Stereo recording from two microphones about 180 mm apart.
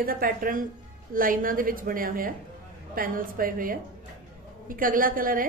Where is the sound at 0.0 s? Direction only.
55° right (ahead or behind).